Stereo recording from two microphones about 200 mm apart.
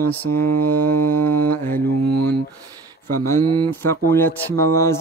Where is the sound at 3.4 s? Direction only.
20° right (ahead or behind).